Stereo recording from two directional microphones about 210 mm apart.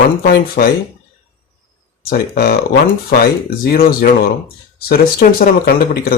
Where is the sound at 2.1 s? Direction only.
45° left (ahead or behind).